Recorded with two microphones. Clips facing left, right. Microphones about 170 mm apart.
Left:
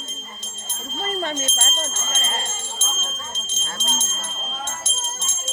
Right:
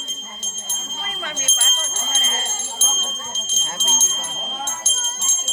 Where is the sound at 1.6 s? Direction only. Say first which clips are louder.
Left 4 dB; 35° left (ahead or behind).